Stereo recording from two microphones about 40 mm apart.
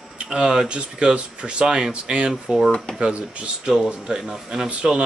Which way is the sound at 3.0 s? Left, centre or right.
Right.